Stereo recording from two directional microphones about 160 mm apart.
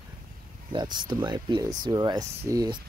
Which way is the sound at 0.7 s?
30° right (ahead or behind).